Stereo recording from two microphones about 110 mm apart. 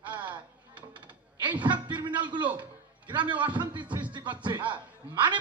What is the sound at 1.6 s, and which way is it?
A man's voice, 45° right (ahead or behind).